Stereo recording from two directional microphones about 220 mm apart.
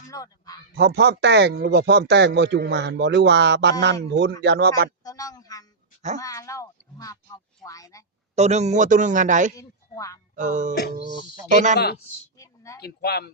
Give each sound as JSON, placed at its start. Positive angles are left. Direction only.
{"t": 0.1, "sound": "speech", "side_deg": 15}
{"t": 0.8, "sound": "speech", "side_deg": -50}
{"t": 5.0, "sound": "speech", "side_deg": 15}
{"t": 8.4, "sound": "a man's voice", "side_deg": -30}
{"t": 9.6, "sound": "speech", "side_deg": 15}
{"t": 10.3, "sound": "a man's voice", "side_deg": -35}
{"t": 12.4, "sound": "a sound", "side_deg": 15}
{"t": 12.8, "sound": "speech", "side_deg": 45}